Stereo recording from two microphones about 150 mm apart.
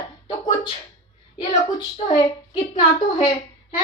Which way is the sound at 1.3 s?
30° left (ahead or behind).